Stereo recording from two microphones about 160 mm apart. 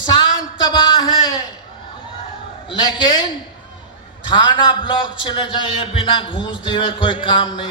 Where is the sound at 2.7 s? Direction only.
30° left (ahead or behind).